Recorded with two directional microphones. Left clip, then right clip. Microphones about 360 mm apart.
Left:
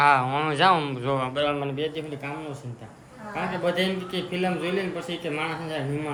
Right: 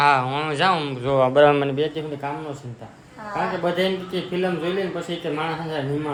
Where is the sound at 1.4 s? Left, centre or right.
Right.